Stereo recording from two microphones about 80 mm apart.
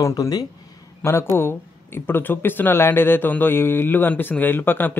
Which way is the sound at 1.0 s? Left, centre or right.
Left.